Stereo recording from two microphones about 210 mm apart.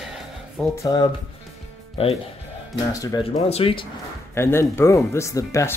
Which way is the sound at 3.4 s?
30° left (ahead or behind).